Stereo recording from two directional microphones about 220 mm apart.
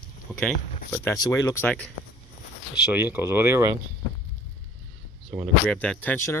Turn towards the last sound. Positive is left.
turn(degrees=10)  # may be behind; listen again after turning